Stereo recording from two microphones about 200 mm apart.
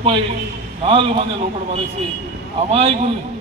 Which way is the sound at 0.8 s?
30° right (ahead or behind).